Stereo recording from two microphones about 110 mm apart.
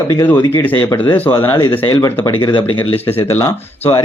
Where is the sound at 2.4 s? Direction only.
50° left (ahead or behind).